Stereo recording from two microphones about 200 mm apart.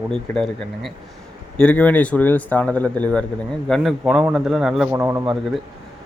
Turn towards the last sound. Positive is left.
turn(degrees=-15)  # may be behind; listen again after turning